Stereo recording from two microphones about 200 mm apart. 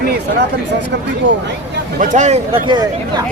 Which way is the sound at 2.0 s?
35° right (ahead or behind).